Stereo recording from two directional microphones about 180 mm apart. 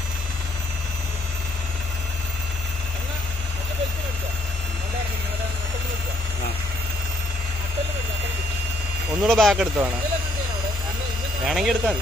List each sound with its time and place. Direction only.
9.2 s speech: centre (ahead or behind)
11.4 s speech: centre (ahead or behind)